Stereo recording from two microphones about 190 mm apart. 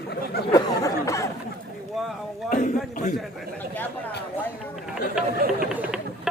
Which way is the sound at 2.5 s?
40° left (ahead or behind).